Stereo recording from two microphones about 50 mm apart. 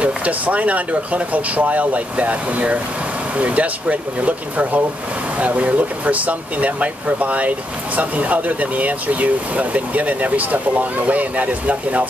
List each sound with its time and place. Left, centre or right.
0.0 s speech: right